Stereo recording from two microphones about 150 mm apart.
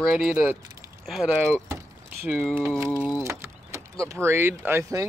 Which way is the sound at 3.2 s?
20° right (ahead or behind).